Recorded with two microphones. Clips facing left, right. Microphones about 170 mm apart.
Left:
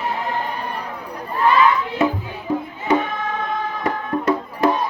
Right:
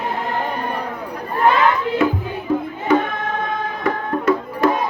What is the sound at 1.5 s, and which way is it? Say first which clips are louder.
Crowd: even; 55° right (ahead or behind).